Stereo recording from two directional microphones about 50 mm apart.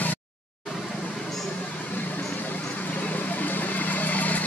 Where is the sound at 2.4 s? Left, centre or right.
Left.